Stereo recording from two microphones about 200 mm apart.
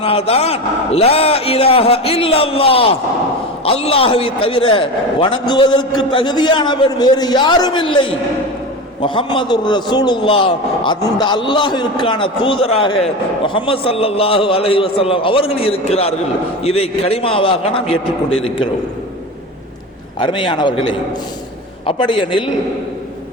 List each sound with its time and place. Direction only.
0.0 s a man's voice: 30° left (ahead or behind)
20.1 s a man's voice: 25° left (ahead or behind)